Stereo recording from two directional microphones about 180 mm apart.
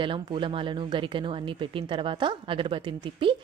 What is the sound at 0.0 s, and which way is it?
Speech, 30° right (ahead or behind).